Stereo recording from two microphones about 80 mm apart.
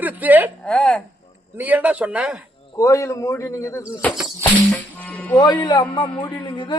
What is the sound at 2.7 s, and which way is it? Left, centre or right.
A man's voice, left.